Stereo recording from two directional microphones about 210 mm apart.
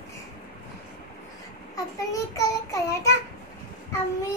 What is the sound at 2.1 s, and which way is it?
Child singing, 15° left (ahead or behind).